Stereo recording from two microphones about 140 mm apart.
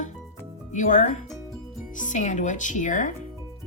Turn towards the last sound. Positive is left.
turn(degrees=65)  # may be behind; listen again after turning